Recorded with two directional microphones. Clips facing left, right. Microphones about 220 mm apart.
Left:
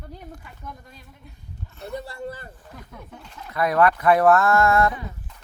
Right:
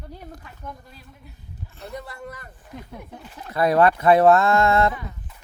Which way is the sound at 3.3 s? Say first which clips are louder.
Right 2 dB; 30° right (ahead or behind).